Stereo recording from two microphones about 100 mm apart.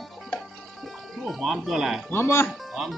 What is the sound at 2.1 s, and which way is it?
Speech, 25° left (ahead or behind).